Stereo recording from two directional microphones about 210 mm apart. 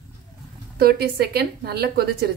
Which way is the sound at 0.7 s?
50° right (ahead or behind).